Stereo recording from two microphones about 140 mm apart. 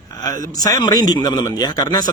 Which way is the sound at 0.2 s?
25° left (ahead or behind).